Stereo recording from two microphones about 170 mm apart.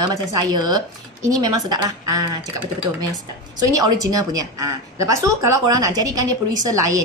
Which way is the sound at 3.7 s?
20° right (ahead or behind).